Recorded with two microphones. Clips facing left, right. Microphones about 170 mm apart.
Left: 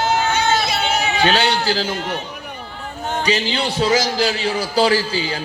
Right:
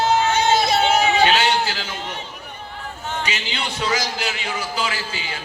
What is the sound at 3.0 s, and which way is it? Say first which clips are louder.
A man's voice: left 8 dB; 35° left (ahead or behind).